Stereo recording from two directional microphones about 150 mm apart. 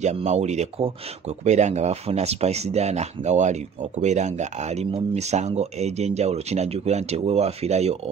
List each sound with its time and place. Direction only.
0.0 s speech: 50° right (ahead or behind)